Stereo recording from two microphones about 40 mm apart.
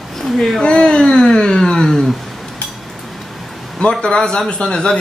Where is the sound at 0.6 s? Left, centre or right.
Left.